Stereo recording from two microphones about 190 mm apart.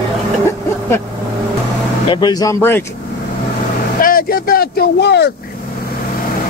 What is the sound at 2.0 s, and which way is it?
Speech, 20° left (ahead or behind).